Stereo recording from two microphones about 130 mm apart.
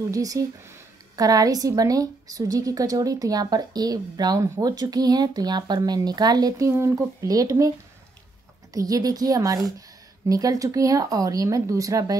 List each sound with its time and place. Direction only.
0.1 s a woman's voice: 25° right (ahead or behind)
8.7 s a woman's voice: 30° right (ahead or behind)